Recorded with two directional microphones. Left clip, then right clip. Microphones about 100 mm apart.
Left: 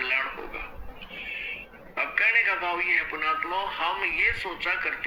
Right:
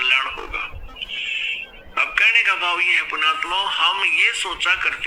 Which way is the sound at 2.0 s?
20° right (ahead or behind).